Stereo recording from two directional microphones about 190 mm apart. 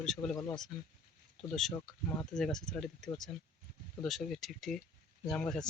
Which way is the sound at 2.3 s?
5° left (ahead or behind).